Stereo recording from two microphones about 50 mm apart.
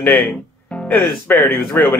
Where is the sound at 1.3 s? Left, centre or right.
Left.